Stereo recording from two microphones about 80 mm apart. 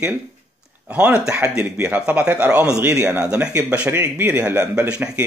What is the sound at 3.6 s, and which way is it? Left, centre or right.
Speech, centre.